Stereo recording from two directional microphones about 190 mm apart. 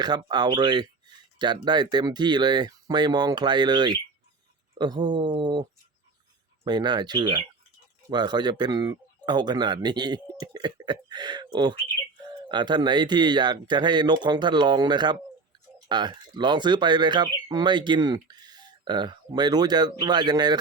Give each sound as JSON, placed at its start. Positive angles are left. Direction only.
{"t": 0.0, "sound": "speech", "side_deg": -20}
{"t": 6.7, "sound": "speech", "side_deg": -20}